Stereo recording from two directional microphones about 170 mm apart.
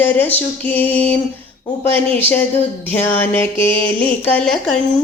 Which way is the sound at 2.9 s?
10° left (ahead or behind).